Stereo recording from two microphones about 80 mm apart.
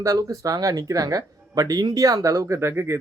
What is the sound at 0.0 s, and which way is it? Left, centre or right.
Speech, right.